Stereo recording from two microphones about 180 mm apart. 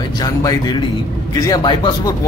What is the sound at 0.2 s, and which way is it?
Speech, 20° left (ahead or behind).